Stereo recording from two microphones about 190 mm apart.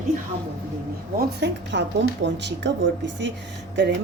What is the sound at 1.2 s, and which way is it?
A woman's voice, 65° right (ahead or behind).